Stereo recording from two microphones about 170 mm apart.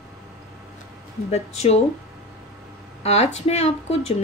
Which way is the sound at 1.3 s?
40° left (ahead or behind).